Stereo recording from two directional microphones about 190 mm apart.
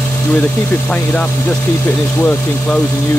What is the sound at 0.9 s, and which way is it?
Speech, 5° left (ahead or behind).